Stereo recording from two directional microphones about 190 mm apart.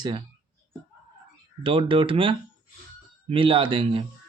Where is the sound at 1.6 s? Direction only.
25° right (ahead or behind).